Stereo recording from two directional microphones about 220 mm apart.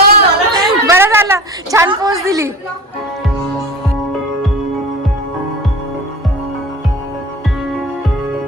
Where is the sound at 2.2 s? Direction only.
15° right (ahead or behind).